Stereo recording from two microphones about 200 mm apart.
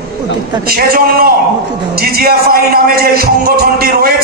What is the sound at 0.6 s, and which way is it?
Music, 50° right (ahead or behind).